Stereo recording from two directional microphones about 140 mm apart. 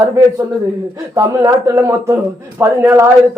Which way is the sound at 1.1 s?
20° right (ahead or behind).